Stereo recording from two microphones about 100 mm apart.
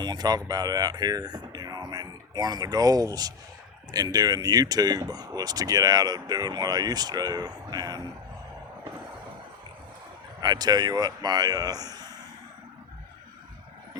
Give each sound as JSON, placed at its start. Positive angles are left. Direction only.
{"t": 0.0, "sound": "speech", "side_deg": -45}
{"t": 10.4, "sound": "speech", "side_deg": -40}